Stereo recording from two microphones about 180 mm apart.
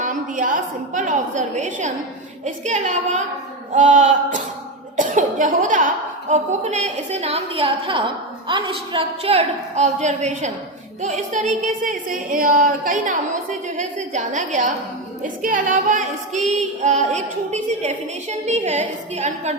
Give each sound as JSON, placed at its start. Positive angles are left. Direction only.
{"t": 0.0, "sound": "a woman's voice", "side_deg": -45}
{"t": 6.3, "sound": "female singing", "side_deg": -40}
{"t": 11.0, "sound": "speech", "side_deg": -40}
{"t": 15.2, "sound": "female singing", "side_deg": -45}